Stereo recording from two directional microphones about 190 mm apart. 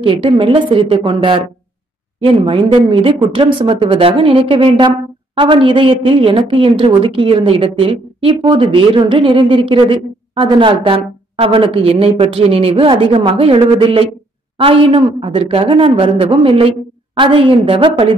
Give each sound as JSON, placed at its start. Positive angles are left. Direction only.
{"t": 0.0, "sound": "a woman's voice", "side_deg": -25}